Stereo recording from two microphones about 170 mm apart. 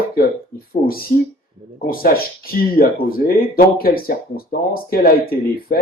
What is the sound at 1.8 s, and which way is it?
Speech, 60° left (ahead or behind).